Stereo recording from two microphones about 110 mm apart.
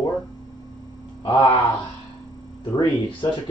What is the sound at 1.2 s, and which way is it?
Speech, 45° left (ahead or behind).